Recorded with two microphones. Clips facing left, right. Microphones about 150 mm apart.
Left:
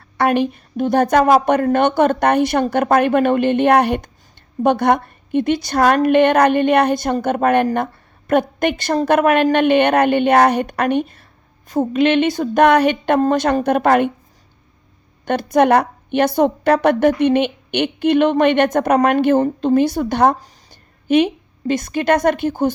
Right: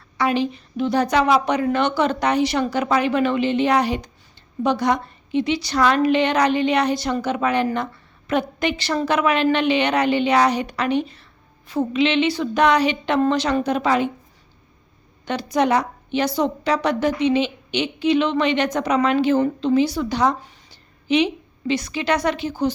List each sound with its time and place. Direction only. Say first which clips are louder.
0.2 s a woman's voice: left 4 dB; 55° left (ahead or behind)
15.2 s a woman's voice: left 6 dB; 55° left (ahead or behind)
20.4 s a sound: left 1 dB; 50° left (ahead or behind)
21.7 s a woman's voice: left 5 dB; 50° left (ahead or behind)